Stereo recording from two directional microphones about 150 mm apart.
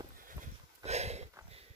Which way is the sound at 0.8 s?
45° right (ahead or behind).